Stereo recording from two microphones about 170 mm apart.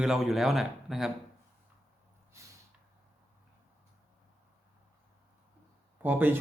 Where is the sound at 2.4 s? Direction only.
15° right (ahead or behind).